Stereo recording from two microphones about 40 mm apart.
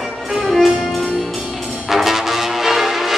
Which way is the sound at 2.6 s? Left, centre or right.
Centre.